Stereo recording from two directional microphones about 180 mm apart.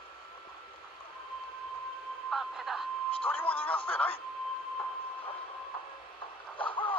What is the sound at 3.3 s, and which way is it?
Speech, 10° left (ahead or behind).